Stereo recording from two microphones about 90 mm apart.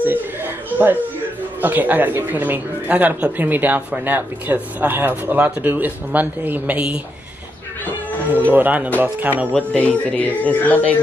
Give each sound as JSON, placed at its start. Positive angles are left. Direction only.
{"t": 0.0, "sound": "a sound", "side_deg": -20}
{"t": 1.6, "sound": "speech", "side_deg": -20}
{"t": 8.5, "sound": "speech", "side_deg": -20}
{"t": 9.5, "sound": "speech", "side_deg": 10}